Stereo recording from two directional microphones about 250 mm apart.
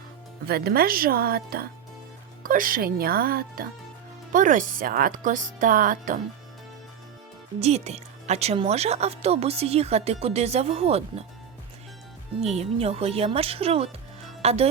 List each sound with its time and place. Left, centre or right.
0.4 s speech: right
7.6 s a woman's voice: right
12.5 s a woman's voice: right